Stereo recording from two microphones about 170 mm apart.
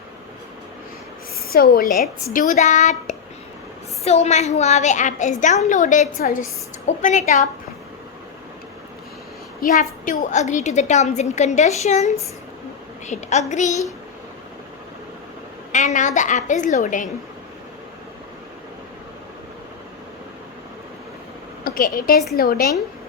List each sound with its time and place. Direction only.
1.5 s a woman's voice: 60° left (ahead or behind)
2.3 s a woman's voice: 50° left (ahead or behind)
9.6 s a woman's voice: 55° left (ahead or behind)
15.7 s a woman's voice: 45° left (ahead or behind)
21.6 s a woman's voice: 55° left (ahead or behind)